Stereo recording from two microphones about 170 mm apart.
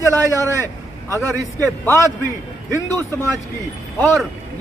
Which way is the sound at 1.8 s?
15° left (ahead or behind).